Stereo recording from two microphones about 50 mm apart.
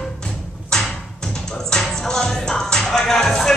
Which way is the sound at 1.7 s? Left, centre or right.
Centre.